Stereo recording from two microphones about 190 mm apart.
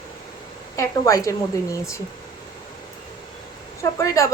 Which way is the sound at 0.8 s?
15° left (ahead or behind).